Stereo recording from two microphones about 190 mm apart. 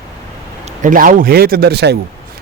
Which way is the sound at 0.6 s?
45° right (ahead or behind).